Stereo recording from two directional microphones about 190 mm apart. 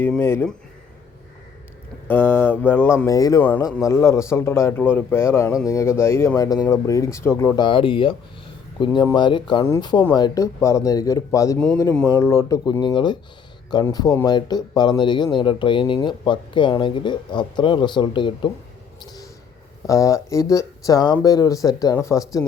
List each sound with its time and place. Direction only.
0.0 s speech: 10° left (ahead or behind)
2.0 s speech: 10° left (ahead or behind)
19.9 s speech: 15° left (ahead or behind)